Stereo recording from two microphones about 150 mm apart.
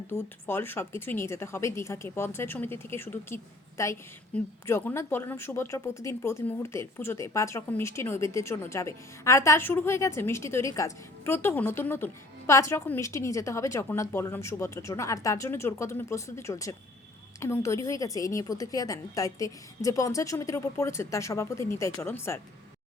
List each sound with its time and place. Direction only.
0.1 s a woman's voice: 15° left (ahead or behind)